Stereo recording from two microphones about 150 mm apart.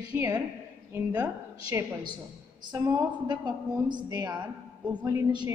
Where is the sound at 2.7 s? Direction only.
25° right (ahead or behind).